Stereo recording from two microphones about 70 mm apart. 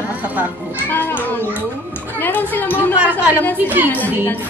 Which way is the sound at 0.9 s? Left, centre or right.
Left.